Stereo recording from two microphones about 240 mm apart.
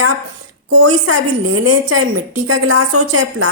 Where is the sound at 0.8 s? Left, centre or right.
Right.